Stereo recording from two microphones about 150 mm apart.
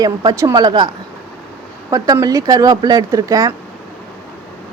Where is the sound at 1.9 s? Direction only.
25° right (ahead or behind).